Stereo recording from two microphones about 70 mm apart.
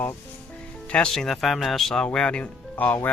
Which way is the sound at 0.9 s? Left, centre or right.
Centre.